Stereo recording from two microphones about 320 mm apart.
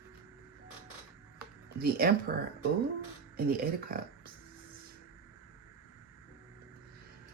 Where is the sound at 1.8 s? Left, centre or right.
Right.